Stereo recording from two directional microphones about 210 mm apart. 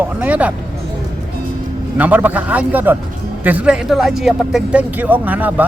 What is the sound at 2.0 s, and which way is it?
Speech, 10° right (ahead or behind).